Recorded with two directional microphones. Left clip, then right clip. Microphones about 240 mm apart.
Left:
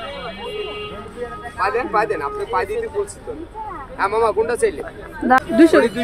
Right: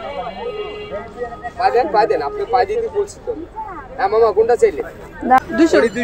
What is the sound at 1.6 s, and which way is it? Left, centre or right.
Speech, centre.